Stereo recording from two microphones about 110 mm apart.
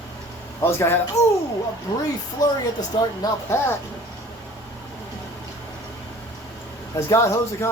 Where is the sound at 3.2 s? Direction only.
35° left (ahead or behind).